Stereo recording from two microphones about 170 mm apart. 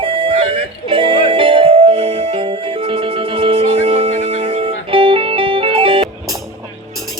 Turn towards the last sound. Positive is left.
turn(degrees=-30)  # may be behind; listen again after turning